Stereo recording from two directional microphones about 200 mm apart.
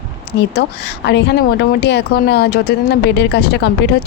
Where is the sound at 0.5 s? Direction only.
55° left (ahead or behind).